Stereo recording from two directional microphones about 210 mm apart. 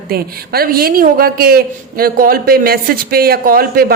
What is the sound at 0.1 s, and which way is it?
A woman's voice, 45° right (ahead or behind).